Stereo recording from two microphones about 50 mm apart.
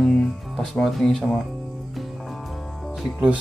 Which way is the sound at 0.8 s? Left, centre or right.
Centre.